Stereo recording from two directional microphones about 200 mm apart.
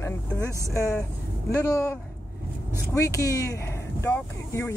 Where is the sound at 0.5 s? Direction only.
15° right (ahead or behind).